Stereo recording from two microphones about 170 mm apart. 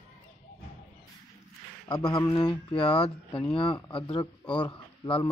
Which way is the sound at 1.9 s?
25° left (ahead or behind).